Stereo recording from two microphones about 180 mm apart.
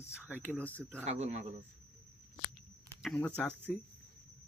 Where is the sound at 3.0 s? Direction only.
5° left (ahead or behind).